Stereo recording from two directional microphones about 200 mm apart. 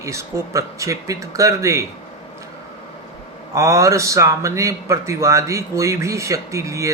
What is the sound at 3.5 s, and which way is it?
A man's voice, 15° right (ahead or behind).